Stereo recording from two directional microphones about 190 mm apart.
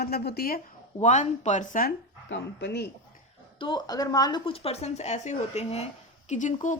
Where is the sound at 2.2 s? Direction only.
65° left (ahead or behind).